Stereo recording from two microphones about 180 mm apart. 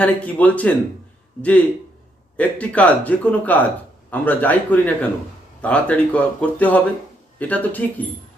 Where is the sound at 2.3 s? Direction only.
5° left (ahead or behind).